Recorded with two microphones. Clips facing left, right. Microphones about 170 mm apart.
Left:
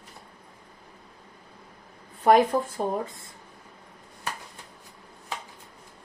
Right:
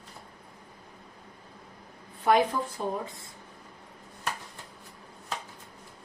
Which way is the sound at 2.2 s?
45° left (ahead or behind).